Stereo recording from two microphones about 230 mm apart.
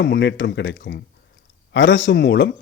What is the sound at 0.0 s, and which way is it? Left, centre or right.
A man's voice, left.